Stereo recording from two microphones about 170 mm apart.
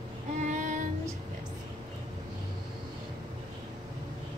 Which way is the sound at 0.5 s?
45° right (ahead or behind).